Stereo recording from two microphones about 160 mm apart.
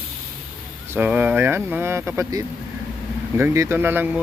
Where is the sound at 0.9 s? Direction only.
10° right (ahead or behind).